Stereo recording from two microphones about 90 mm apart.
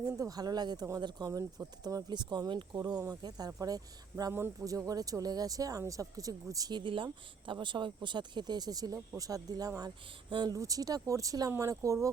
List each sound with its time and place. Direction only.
0.2 s speech: 45° right (ahead or behind)
4.3 s speech: 25° right (ahead or behind)
4.6 s speech: 40° right (ahead or behind)
10.2 s speech: 65° right (ahead or behind)
10.5 s speech: 40° right (ahead or behind)